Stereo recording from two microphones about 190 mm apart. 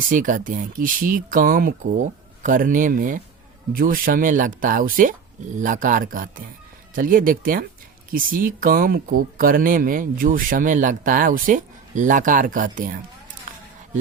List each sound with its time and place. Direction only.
0.1 s speech: 45° right (ahead or behind)